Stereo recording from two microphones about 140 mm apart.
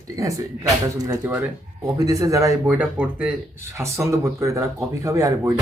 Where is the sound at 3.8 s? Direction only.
20° right (ahead or behind).